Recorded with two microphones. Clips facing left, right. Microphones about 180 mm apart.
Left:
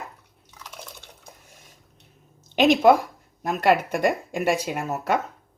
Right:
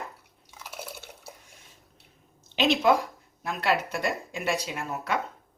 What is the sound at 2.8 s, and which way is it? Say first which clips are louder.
Speech: left 6 dB; 45° left (ahead or behind).